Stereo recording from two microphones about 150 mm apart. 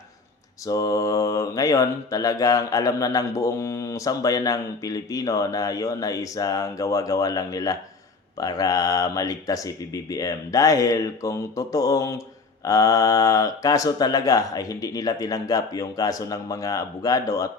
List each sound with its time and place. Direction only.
0.7 s mantra: 20° left (ahead or behind)